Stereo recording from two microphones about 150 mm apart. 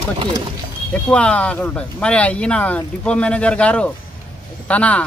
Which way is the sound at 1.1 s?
10° left (ahead or behind).